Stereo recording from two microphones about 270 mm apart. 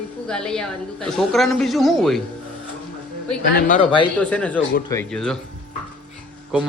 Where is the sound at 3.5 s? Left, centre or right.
Left.